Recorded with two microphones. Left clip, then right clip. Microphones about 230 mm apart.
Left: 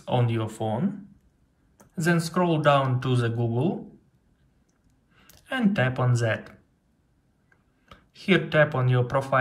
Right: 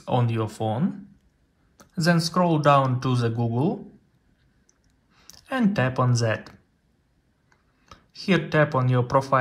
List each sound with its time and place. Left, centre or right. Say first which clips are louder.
0.1 s speech: right 1 dB; centre
2.0 s speech: right 2 dB; centre
5.1 s speech: right 2 dB; centre
7.4 s tick-tock: right 2 dB; centre
8.7 s speech: right 4 dB; centre